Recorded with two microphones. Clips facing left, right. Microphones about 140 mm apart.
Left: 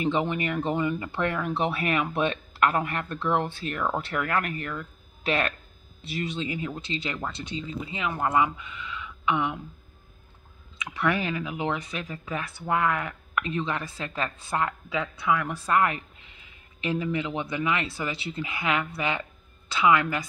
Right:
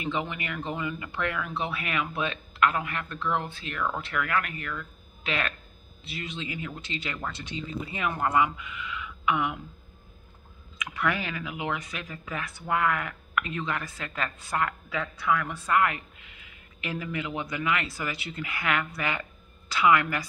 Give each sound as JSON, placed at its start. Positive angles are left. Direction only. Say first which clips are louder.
{"t": 0.0, "sound": "speech", "louder": "left 6 dB", "side_deg": 30}
{"t": 10.8, "sound": "speech", "louder": "left 3 dB", "side_deg": 30}
{"t": 15.5, "sound": "speech", "louder": "left 1 dB", "side_deg": 30}